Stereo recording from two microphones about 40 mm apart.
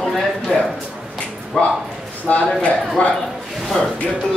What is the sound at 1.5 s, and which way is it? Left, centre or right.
Speech, centre.